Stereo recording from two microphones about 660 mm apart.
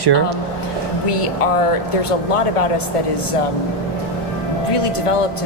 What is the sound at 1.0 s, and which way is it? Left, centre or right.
A woman's voice, left.